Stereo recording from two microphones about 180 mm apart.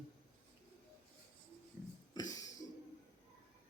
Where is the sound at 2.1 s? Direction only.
20° left (ahead or behind).